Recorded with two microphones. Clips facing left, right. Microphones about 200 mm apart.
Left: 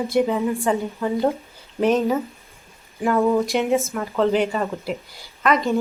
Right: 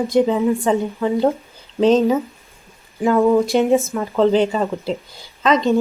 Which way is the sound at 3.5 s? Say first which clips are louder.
Right 5 dB; 35° right (ahead or behind).